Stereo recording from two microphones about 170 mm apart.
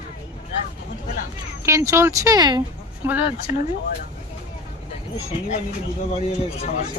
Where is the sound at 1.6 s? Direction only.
15° right (ahead or behind).